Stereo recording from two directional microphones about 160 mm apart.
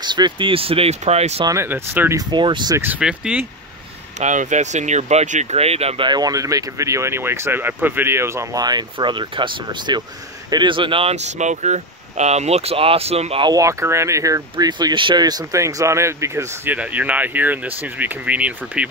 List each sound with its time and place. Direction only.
0.0 s speech: 30° right (ahead or behind)
1.4 s speech: 15° right (ahead or behind)
2.1 s speech: 30° right (ahead or behind)
2.8 s speech: 10° right (ahead or behind)
4.2 s speech: 50° right (ahead or behind)
6.0 s speech: 25° right (ahead or behind)
13.5 s speech: 20° right (ahead or behind)